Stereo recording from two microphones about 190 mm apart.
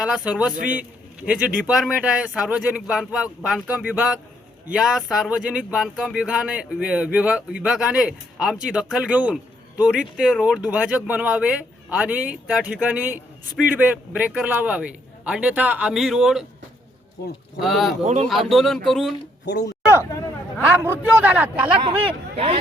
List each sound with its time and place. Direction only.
0.0 s speech: 5° right (ahead or behind)
0.5 s a man's voice: 45° right (ahead or behind)
0.8 s speech: 5° right (ahead or behind)
17.6 s speech: centre (ahead or behind)
18.0 s speech: 35° right (ahead or behind)
18.3 s speech: centre (ahead or behind)
19.5 s speech: 65° left (ahead or behind)
20.6 s a man's voice: 10° right (ahead or behind)
21.8 s speech: 30° right (ahead or behind)